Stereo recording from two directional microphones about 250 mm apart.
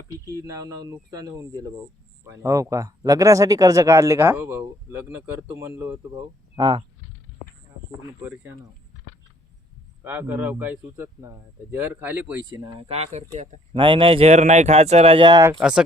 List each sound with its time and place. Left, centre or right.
0.3 s speech: centre
10.0 s speech: centre
12.5 s speech: right
15.5 s speech: centre